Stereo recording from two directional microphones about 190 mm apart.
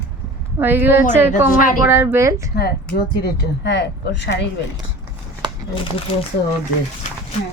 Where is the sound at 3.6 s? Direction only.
65° left (ahead or behind).